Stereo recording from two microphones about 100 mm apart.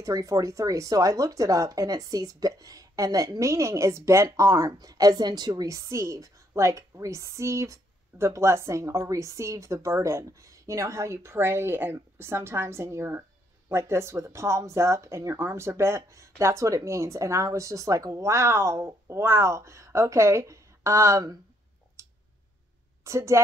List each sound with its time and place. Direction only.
0.0 s a woman's voice: 35° right (ahead or behind)
22.0 s clicking: 30° right (ahead or behind)
23.0 s a woman's voice: 30° right (ahead or behind)